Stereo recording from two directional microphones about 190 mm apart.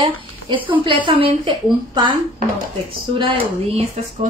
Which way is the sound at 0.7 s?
25° right (ahead or behind).